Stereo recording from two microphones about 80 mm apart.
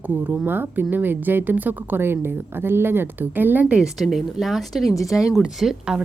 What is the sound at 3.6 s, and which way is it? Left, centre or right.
Speech, centre.